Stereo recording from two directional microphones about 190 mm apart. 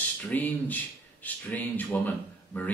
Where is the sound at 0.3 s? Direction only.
10° left (ahead or behind).